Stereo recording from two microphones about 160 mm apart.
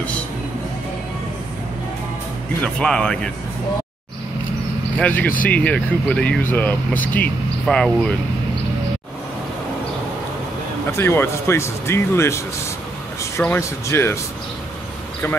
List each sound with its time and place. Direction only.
2.6 s speech: 5° left (ahead or behind)
4.9 s speech: 10° left (ahead or behind)
10.9 s speech: 15° left (ahead or behind)
13.4 s speech: 15° left (ahead or behind)